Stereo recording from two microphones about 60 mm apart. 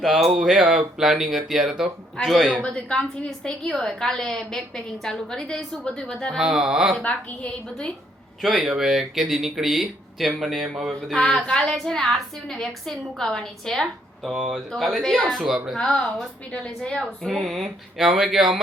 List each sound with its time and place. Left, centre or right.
0.0 s speech: centre
2.6 s a woman's voice: centre
6.3 s speech: centre
7.0 s a woman's voice: left
8.4 s speech: centre
11.1 s a woman's voice: centre
13.8 s speech: centre
15.8 s a woman's voice: centre
17.0 s speech: centre